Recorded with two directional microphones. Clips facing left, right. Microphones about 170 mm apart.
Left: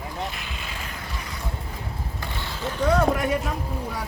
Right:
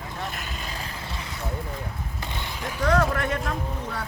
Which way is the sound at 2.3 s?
15° right (ahead or behind).